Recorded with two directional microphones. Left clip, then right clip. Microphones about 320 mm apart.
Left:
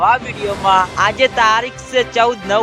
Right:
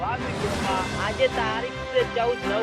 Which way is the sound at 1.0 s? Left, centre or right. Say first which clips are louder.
Left 11 dB; left.